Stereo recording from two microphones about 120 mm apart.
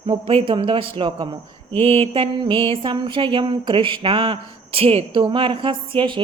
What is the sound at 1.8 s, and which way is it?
A woman's voice, 55° right (ahead or behind).